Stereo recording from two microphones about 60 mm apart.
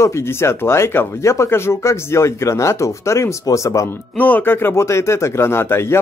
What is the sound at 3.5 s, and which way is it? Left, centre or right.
Speech, left.